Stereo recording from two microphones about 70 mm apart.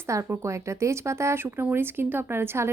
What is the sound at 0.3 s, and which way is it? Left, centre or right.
Speech, right.